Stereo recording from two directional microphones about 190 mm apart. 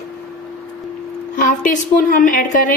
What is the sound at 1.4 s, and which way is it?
A woman's voice, 45° left (ahead or behind).